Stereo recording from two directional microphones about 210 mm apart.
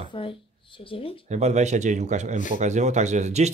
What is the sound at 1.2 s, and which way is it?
Speech, 30° right (ahead or behind).